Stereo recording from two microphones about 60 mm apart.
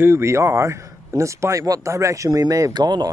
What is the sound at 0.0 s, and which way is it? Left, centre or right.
Speech, right.